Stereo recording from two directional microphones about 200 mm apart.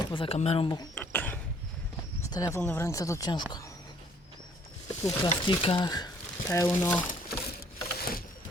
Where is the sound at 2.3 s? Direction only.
15° left (ahead or behind).